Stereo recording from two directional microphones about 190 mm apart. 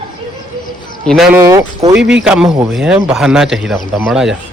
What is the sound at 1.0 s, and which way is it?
Speech, centre (ahead or behind).